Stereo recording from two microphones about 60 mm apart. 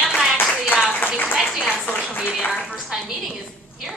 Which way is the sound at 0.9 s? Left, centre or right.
Left.